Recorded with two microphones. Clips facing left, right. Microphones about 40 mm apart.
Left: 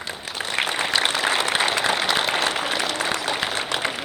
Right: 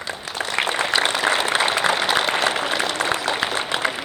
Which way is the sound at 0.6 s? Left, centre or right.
Centre.